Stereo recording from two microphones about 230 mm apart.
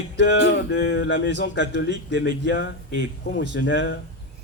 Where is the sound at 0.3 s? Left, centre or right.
Left.